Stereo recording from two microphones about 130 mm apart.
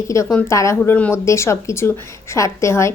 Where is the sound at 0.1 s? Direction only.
25° left (ahead or behind).